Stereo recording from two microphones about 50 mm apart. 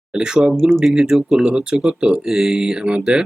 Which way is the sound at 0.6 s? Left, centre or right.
Centre.